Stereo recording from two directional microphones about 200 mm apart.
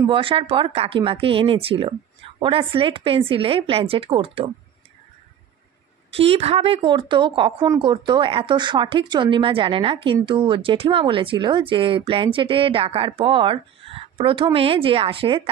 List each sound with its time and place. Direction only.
0.0 s speech: 25° right (ahead or behind)
6.1 s speech: 30° right (ahead or behind)